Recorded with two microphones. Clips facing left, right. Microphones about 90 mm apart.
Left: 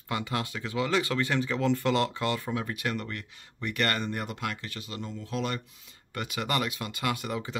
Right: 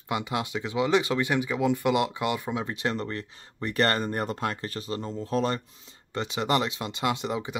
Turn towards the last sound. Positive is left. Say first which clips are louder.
# right 3 dB
turn(degrees=-20)  # may be behind; listen again after turning